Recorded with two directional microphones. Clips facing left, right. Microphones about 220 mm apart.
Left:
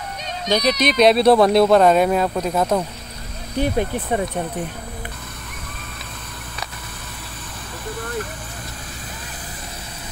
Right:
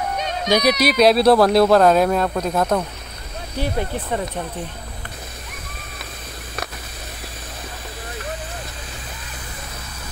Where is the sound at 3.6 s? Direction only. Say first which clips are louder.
Left 4 dB; 15° left (ahead or behind).